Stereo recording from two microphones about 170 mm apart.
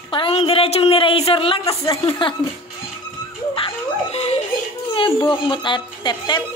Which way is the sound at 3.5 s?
35° left (ahead or behind).